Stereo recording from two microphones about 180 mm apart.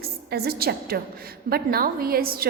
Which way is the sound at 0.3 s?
60° right (ahead or behind).